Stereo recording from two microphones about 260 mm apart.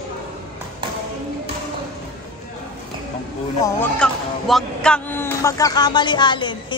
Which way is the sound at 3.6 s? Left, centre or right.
Centre.